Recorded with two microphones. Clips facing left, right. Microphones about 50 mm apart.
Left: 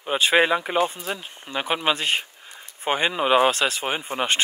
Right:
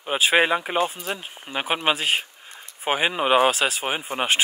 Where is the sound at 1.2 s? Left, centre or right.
Centre.